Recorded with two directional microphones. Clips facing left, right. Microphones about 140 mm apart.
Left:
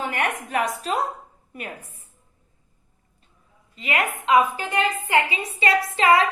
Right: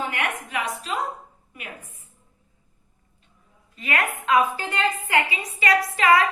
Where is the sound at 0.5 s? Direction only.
40° left (ahead or behind).